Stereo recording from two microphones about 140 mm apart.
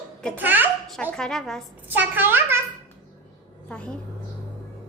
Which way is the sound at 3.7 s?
5° left (ahead or behind).